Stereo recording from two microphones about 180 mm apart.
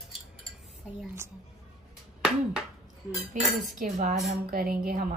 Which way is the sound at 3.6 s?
45° right (ahead or behind).